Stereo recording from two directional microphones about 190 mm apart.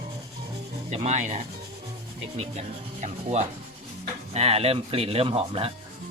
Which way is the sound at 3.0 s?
35° right (ahead or behind).